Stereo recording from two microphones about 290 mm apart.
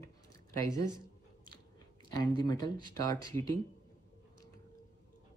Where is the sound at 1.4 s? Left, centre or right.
Centre.